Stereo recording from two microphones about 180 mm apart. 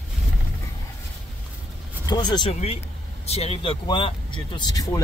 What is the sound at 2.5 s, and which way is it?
Speech, 35° left (ahead or behind).